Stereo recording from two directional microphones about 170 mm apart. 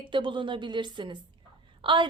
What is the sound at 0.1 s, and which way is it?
A woman's voice, 30° right (ahead or behind).